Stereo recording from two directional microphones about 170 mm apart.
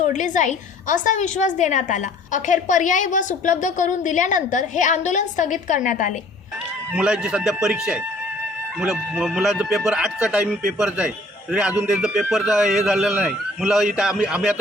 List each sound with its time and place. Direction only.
0.0 s a woman's voice: 45° left (ahead or behind)
6.9 s speech: 5° right (ahead or behind)